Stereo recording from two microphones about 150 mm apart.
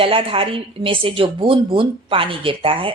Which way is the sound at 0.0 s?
35° right (ahead or behind).